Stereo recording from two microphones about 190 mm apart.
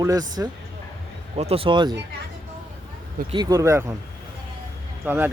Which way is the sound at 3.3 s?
20° right (ahead or behind).